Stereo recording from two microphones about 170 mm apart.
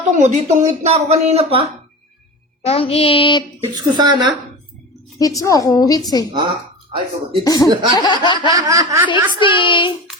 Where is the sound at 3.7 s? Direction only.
25° right (ahead or behind).